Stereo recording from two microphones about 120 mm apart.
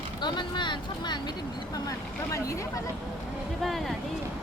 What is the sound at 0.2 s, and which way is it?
Speech, 40° left (ahead or behind).